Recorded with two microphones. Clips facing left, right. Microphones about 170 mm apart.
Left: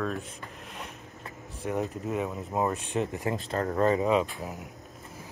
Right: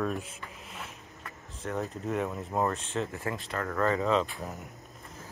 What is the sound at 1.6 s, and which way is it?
Speech, 15° left (ahead or behind).